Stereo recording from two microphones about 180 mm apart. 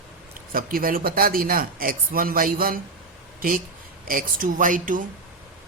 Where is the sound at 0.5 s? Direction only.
50° right (ahead or behind).